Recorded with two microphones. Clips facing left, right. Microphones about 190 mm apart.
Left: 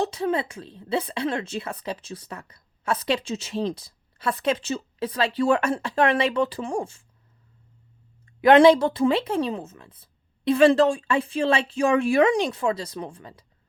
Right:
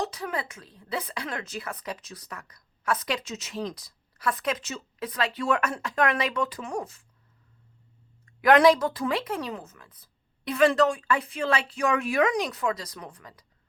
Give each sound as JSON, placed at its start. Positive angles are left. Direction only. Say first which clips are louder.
{"t": 0.0, "sound": "a woman's voice", "louder": "left 7 dB", "side_deg": 25}
{"t": 8.4, "sound": "a woman's voice", "louder": "left 4 dB", "side_deg": 25}